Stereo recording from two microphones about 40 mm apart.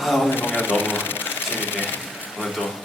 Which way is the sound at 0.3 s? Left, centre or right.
Left.